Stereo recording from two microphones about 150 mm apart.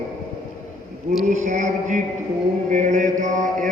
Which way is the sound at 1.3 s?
55° right (ahead or behind).